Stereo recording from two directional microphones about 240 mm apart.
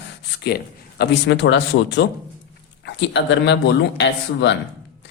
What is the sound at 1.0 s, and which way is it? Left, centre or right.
Speech, left.